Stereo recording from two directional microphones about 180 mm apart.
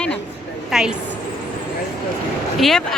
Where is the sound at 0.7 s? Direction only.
5° right (ahead or behind).